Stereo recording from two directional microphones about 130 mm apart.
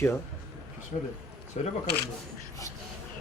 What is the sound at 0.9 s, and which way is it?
Speech, 60° left (ahead or behind).